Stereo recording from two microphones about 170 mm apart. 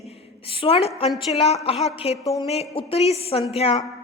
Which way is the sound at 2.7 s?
35° left (ahead or behind).